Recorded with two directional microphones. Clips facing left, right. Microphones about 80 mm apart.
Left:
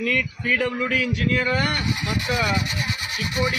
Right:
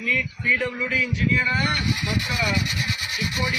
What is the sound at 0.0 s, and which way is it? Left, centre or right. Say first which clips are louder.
A man's voice: left 1 dB; left.